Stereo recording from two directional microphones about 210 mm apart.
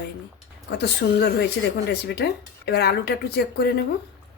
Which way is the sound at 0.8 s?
50° left (ahead or behind).